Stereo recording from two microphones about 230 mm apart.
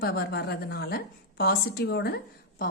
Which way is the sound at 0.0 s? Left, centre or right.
Left.